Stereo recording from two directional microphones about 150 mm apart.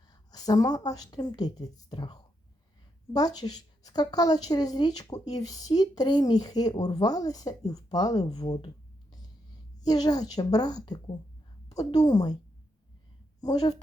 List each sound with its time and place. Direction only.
0.1 s a woman's voice: 25° left (ahead or behind)
9.8 s a woman's voice: 25° left (ahead or behind)
13.4 s a woman's voice: 25° left (ahead or behind)